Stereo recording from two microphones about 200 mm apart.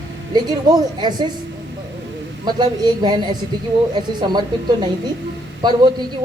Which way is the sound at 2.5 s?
20° right (ahead or behind).